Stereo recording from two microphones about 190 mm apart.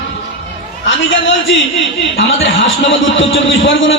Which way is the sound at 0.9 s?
80° left.